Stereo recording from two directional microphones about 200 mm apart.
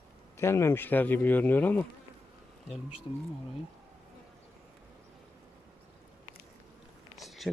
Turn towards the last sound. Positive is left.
turn(degrees=0)  # may be behind; listen again after turning